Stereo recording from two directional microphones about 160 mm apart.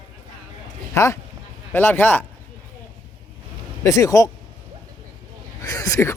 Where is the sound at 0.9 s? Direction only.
20° left (ahead or behind).